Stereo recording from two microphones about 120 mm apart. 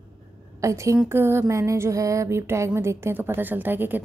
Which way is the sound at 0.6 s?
25° right (ahead or behind).